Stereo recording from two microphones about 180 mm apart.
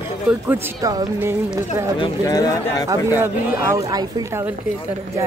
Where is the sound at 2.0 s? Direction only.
20° left (ahead or behind).